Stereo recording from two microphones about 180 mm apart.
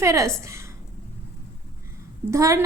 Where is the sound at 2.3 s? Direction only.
15° right (ahead or behind).